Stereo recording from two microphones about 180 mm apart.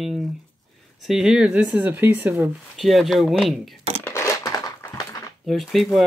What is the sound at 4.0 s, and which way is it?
Crushing, 15° left (ahead or behind).